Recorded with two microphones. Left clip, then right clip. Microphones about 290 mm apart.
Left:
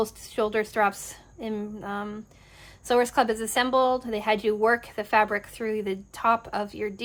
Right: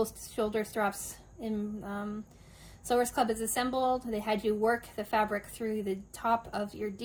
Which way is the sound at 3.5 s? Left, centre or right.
Centre.